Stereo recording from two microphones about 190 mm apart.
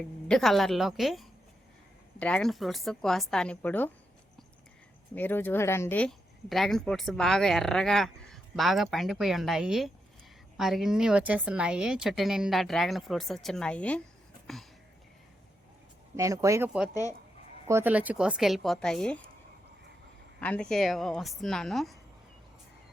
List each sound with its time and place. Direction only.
0.3 s speech: centre (ahead or behind)
5.1 s speech: 10° left (ahead or behind)
14.4 s a sound: centre (ahead or behind)
16.1 s speech: 15° right (ahead or behind)
16.9 s speech: 20° left (ahead or behind)
17.7 s speech: 10° right (ahead or behind); by 19.2 s 5° left (ahead or behind)
20.4 s speech: 5° left (ahead or behind)